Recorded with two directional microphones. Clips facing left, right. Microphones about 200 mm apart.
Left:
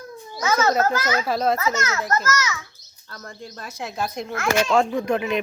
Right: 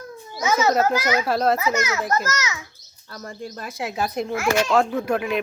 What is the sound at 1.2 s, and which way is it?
Speech, centre (ahead or behind).